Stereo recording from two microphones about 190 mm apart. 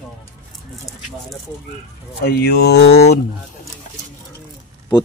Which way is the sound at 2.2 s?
55° left (ahead or behind).